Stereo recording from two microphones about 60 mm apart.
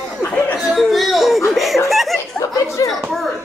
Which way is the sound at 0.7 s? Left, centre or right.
Centre.